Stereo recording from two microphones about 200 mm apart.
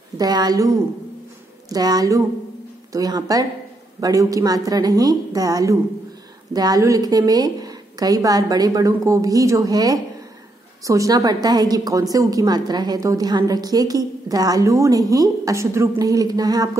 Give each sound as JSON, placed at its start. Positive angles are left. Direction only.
{"t": 0.2, "sound": "a woman's voice", "side_deg": -20}
{"t": 1.7, "sound": "a woman's voice", "side_deg": -20}